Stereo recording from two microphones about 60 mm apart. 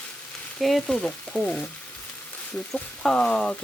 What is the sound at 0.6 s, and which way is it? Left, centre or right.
Frying, centre.